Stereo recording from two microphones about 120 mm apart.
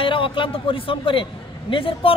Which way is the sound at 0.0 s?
45° left (ahead or behind).